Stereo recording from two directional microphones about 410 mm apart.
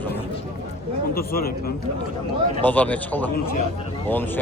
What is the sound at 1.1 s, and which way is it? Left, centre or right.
Speech, left.